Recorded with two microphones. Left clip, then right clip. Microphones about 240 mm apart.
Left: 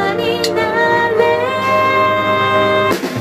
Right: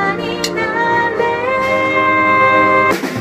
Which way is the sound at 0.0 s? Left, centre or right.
Left.